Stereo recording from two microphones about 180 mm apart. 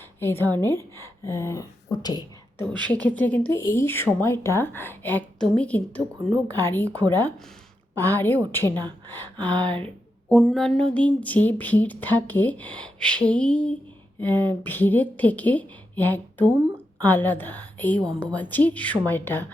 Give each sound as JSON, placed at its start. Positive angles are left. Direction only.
{"t": 0.2, "sound": "speech", "side_deg": 15}
{"t": 2.9, "sound": "speech", "side_deg": 10}